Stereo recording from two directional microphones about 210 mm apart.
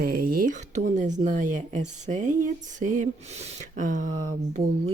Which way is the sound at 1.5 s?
35° right (ahead or behind).